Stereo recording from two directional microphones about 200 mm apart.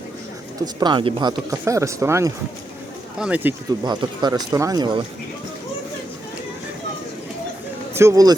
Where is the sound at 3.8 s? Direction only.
20° right (ahead or behind).